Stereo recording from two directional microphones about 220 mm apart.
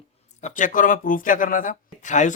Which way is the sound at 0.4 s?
35° left (ahead or behind).